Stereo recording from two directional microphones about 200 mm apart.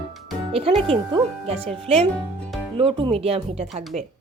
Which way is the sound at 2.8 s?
25° right (ahead or behind).